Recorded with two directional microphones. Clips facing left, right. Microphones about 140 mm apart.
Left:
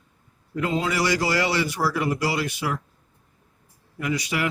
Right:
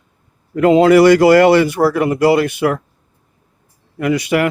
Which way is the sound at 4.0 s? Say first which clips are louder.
Right 11 dB; 60° right (ahead or behind).